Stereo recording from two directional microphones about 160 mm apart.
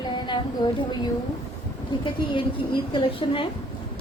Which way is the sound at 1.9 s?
30° left (ahead or behind).